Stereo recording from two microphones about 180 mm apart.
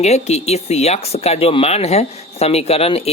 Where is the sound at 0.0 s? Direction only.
35° left (ahead or behind).